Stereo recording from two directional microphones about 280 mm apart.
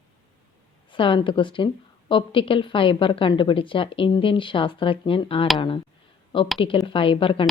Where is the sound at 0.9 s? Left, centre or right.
Centre.